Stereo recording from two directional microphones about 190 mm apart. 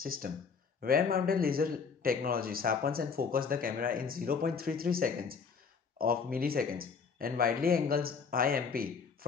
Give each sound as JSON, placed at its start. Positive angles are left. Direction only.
{"t": 0.0, "sound": "speech", "side_deg": -50}